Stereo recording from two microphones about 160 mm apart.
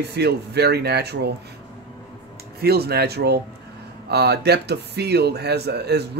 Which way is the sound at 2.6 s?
80° right.